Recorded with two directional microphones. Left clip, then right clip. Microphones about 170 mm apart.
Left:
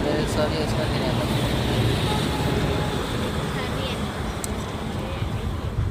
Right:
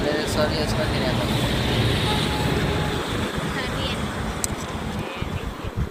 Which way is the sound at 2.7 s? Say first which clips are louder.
Right 1 dB; 50° left (ahead or behind).